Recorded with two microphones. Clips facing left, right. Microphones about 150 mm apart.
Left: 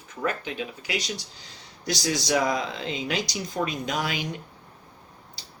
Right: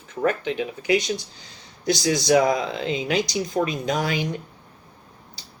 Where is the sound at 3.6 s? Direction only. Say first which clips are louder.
Right 4 dB; 30° right (ahead or behind).